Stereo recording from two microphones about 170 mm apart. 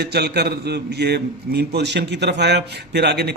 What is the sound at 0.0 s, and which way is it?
A man's voice, 70° right (ahead or behind).